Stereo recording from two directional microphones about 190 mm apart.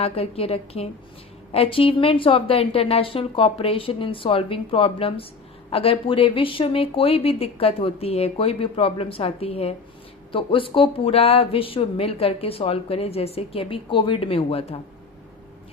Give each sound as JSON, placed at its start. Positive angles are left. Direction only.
{"t": 0.0, "sound": "speech", "side_deg": 30}